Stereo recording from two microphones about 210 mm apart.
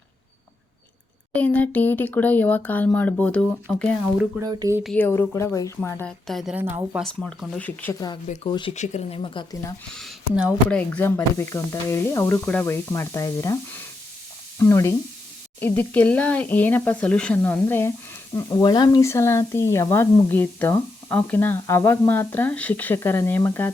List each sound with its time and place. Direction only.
1.3 s speech: 5° left (ahead or behind)
4.4 s speech: 15° right (ahead or behind)
4.8 s a woman's voice: 5° left (ahead or behind); by 7.0 s 10° right (ahead or behind)
7.0 s a woman's voice: 5° left (ahead or behind)
8.4 s speech: 20° left (ahead or behind)
8.7 s speech: 35° left (ahead or behind)
9.9 s speech: centre (ahead or behind)
10.8 s speech: 10° left (ahead or behind)